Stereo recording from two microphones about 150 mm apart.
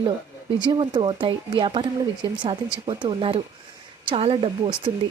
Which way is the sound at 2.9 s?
30° right (ahead or behind).